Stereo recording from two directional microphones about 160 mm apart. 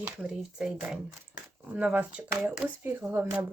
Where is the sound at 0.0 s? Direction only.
5° right (ahead or behind).